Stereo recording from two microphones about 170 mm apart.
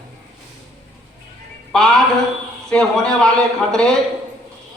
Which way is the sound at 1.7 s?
Centre (ahead or behind).